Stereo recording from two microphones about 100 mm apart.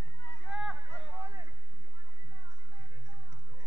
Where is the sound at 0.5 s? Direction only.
5° right (ahead or behind).